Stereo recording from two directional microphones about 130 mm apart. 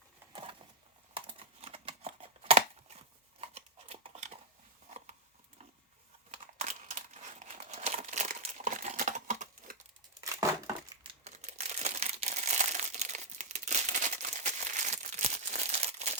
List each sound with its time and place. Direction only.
1.1 s computer keyboard: 45° right (ahead or behind)
3.4 s a sound: 50° right (ahead or behind)
6.3 s crumpling: 65° right (ahead or behind)
11.0 s crumpling: 55° right (ahead or behind)